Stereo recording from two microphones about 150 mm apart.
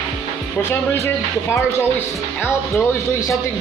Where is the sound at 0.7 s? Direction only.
15° left (ahead or behind).